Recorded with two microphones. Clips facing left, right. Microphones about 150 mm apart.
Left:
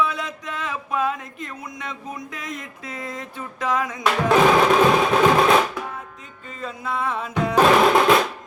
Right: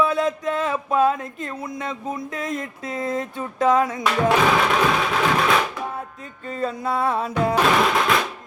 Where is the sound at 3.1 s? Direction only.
30° right (ahead or behind).